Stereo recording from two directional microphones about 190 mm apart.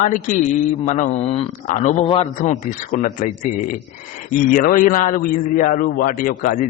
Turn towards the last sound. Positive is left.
turn(degrees=45)  # may be behind; listen again after turning